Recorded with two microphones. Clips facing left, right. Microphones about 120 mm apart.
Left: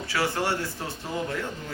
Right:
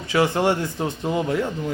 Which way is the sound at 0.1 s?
20° right (ahead or behind).